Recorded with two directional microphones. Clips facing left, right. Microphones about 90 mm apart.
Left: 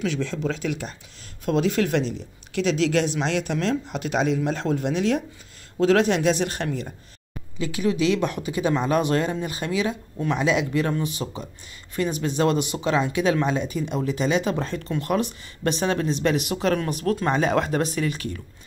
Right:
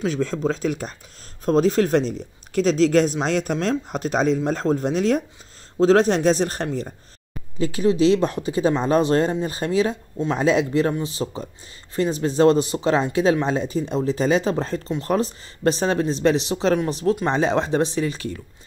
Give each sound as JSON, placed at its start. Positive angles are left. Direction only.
{"t": 0.0, "sound": "speech", "side_deg": -40}